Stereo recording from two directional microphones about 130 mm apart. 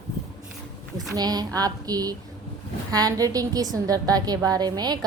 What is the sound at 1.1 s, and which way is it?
A woman's voice, 30° right (ahead or behind).